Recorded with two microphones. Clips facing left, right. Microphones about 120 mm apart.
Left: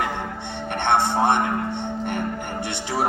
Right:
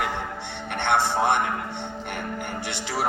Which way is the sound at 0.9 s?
25° left (ahead or behind).